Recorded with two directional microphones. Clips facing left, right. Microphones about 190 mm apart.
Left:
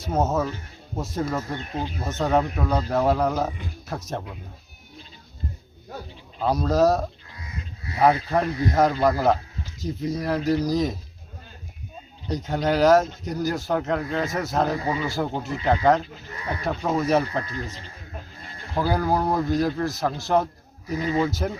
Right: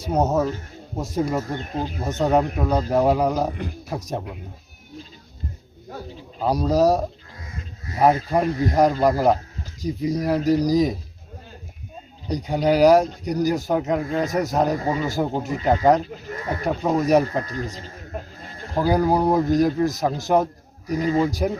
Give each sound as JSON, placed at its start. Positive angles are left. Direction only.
{"t": 0.0, "sound": "a man's voice", "side_deg": -15}
{"t": 1.5, "sound": "speech", "side_deg": -40}
{"t": 2.0, "sound": "a man's voice", "side_deg": -15}
{"t": 6.4, "sound": "a man's voice", "side_deg": -10}
{"t": 8.3, "sound": "a man's voice", "side_deg": -10}
{"t": 12.3, "sound": "a man's voice", "side_deg": -15}
{"t": 14.8, "sound": "speech", "side_deg": -45}
{"t": 15.0, "sound": "a man's voice", "side_deg": -15}
{"t": 16.0, "sound": "speech", "side_deg": -45}
{"t": 17.0, "sound": "a man's voice", "side_deg": -15}
{"t": 17.4, "sound": "speech", "side_deg": -40}
{"t": 18.8, "sound": "a man's voice", "side_deg": -15}
{"t": 20.8, "sound": "speech", "side_deg": -40}
{"t": 21.2, "sound": "a man's voice", "side_deg": -15}